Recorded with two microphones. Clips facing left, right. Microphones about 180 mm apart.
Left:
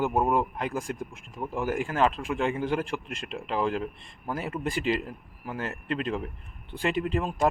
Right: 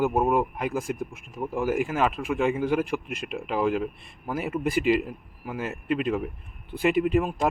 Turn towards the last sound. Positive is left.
turn(degrees=-10)  # may be behind; listen again after turning